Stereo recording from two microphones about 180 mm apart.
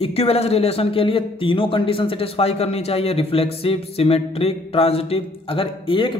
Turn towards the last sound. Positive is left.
turn(degrees=30)  # may be behind; listen again after turning